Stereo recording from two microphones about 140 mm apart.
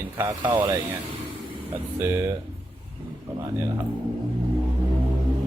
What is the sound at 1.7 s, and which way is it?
Speech, 20° right (ahead or behind).